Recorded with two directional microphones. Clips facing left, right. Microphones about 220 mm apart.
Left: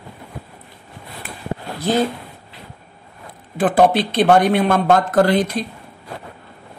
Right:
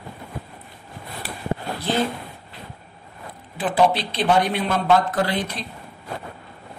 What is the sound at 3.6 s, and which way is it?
Speech, 50° left (ahead or behind).